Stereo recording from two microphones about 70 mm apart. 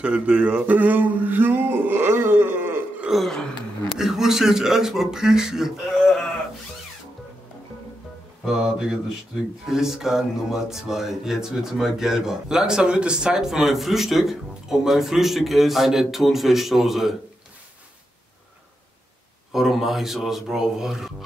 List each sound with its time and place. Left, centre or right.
0.0 s a sound: centre
3.1 s speech: centre
8.5 s speech: centre
19.5 s speech: centre